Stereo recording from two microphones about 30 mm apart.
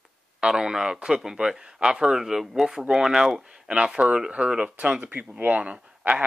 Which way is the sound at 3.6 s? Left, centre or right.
Right.